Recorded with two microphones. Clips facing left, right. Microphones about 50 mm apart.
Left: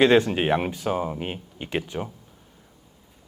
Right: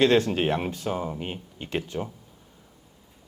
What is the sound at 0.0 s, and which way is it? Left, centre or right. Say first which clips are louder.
Speech: left 2 dB; left.